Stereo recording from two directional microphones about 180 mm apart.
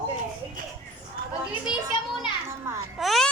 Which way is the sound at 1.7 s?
5° right (ahead or behind).